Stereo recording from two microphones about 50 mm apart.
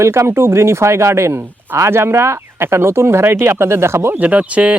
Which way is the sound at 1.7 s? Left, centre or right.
Right.